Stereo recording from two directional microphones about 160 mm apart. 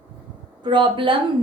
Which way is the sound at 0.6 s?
30° right (ahead or behind).